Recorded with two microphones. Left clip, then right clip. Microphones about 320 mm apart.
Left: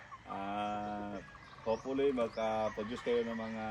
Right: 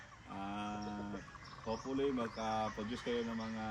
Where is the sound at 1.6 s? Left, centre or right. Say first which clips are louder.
Left 5 dB; centre.